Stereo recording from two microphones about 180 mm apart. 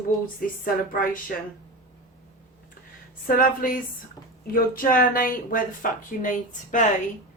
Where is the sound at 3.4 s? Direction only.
50° left (ahead or behind).